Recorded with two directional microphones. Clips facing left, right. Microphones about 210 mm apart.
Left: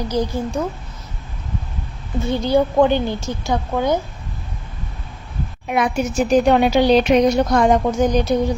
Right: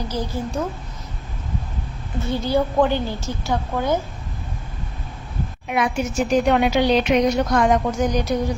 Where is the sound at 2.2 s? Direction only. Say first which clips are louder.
Left 4 dB; 20° left (ahead or behind).